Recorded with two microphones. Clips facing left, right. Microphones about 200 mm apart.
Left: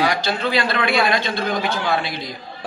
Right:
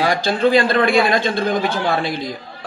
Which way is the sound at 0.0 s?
50° right (ahead or behind).